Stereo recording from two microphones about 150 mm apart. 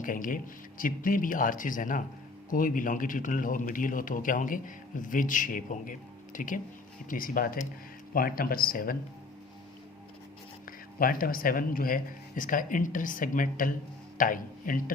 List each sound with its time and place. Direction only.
0.0 s a man's voice: 65° left (ahead or behind)
10.7 s a man's voice: 70° left (ahead or behind)